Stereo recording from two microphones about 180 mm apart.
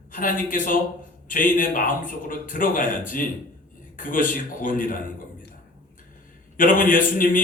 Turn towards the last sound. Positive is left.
turn(degrees=50)  # may be behind; listen again after turning